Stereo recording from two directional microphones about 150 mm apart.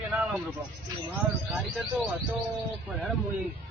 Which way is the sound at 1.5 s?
Centre (ahead or behind).